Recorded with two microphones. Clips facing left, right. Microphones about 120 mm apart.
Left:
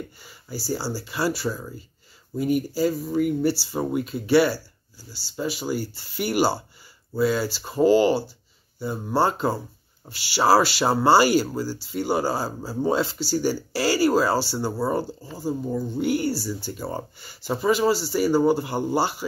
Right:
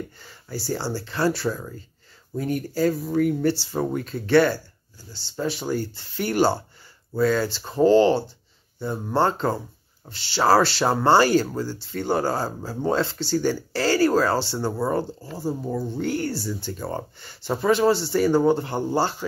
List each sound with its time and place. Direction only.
0.2 s speech: 5° left (ahead or behind)